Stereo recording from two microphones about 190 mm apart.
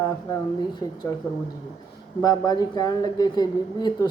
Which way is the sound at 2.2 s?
20° left (ahead or behind).